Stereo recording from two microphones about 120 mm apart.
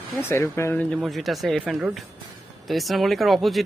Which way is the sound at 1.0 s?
Centre (ahead or behind).